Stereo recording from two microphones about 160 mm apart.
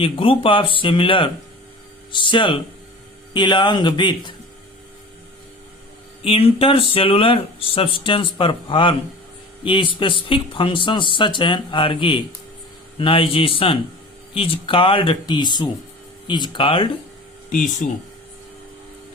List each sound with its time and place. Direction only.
0.0 s speech: 35° left (ahead or behind)
6.2 s speech: 35° left (ahead or behind)
17.8 s speech: 60° left (ahead or behind)